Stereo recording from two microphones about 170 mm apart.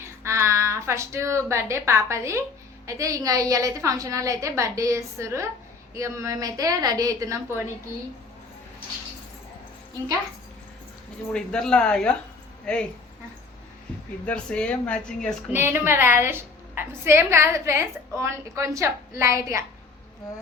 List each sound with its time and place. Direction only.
0.2 s a woman's voice: 15° right (ahead or behind)
11.3 s speech: 5° left (ahead or behind)
14.3 s speech: 5° left (ahead or behind)
15.5 s a woman's voice: 15° right (ahead or behind)